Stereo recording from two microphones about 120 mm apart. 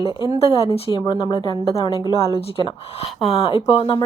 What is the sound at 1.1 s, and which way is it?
A woman's voice, 40° left (ahead or behind).